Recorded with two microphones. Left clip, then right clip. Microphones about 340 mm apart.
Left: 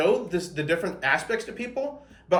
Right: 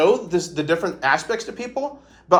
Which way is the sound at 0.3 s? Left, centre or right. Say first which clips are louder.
Right 5 dB; centre.